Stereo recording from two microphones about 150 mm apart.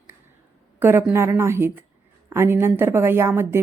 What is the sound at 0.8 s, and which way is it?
A woman's voice, 15° right (ahead or behind).